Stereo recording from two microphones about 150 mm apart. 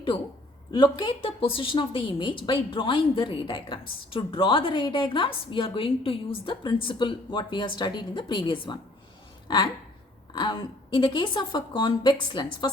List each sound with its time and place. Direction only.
0.7 s a woman's voice: 30° left (ahead or behind)
10.3 s a woman's voice: 35° left (ahead or behind)